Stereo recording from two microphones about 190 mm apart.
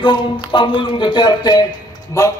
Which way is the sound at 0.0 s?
25° left (ahead or behind).